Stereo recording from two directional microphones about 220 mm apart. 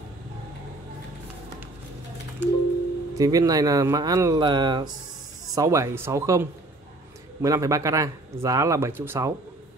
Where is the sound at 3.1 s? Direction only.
15° right (ahead or behind).